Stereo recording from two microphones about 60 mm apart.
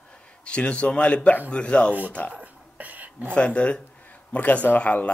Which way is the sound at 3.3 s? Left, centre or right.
Centre.